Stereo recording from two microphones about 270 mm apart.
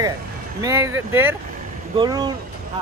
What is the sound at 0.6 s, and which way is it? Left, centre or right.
Speech, centre.